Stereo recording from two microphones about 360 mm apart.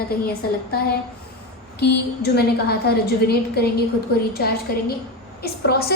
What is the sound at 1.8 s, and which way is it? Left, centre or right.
A woman's voice, left.